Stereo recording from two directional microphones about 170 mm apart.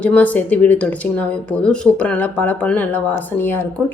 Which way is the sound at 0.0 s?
10° left (ahead or behind).